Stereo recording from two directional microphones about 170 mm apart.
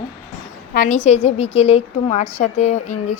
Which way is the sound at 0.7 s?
55° left (ahead or behind).